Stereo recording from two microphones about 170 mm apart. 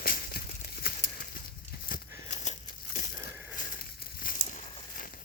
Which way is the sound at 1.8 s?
50° left (ahead or behind).